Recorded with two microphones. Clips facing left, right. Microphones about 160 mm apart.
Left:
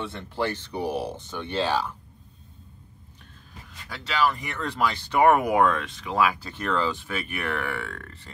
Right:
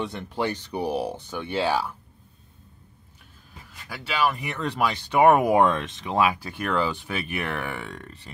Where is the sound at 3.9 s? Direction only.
15° right (ahead or behind).